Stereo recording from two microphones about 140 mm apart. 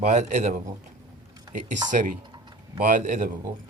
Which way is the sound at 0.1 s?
60° right (ahead or behind).